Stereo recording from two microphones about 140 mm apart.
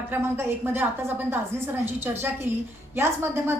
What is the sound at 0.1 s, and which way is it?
Speech, 20° right (ahead or behind).